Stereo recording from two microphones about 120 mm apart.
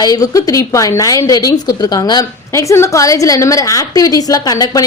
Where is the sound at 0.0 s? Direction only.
30° left (ahead or behind).